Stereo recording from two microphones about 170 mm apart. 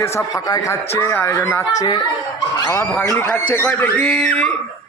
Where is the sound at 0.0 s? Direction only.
15° left (ahead or behind).